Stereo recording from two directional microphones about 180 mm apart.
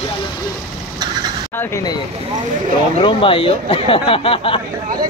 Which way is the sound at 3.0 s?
30° left (ahead or behind).